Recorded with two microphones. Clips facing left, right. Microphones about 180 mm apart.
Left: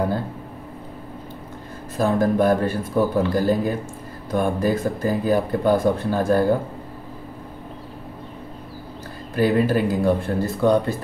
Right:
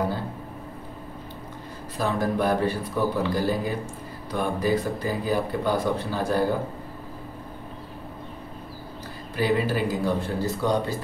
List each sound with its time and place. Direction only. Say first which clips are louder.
2.0 s speech: left 6 dB; 50° left (ahead or behind)
9.3 s speech: left 5 dB; 50° left (ahead or behind)